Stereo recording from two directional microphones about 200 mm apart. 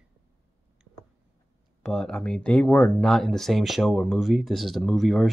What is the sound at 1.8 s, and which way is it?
Speech, 5° left (ahead or behind).